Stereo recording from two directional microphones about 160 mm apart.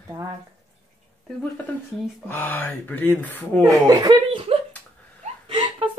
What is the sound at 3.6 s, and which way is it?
Speech, 25° right (ahead or behind).